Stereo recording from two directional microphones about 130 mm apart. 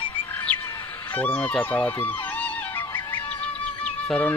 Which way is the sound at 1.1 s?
10° left (ahead or behind).